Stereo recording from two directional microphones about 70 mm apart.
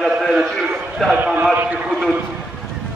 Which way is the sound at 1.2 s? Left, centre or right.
Centre.